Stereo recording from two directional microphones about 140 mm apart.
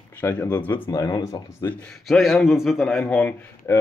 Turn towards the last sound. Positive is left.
turn(degrees=10)  # may be behind; listen again after turning